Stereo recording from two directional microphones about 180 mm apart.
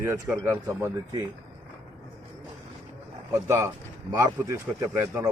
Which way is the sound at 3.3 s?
15° right (ahead or behind).